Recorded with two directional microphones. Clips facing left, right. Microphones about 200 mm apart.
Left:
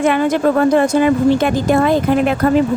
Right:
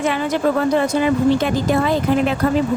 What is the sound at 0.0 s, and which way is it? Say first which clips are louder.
A woman's voice: left 5 dB; 50° left (ahead or behind).